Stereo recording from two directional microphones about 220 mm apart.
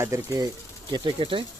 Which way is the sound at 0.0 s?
15° right (ahead or behind).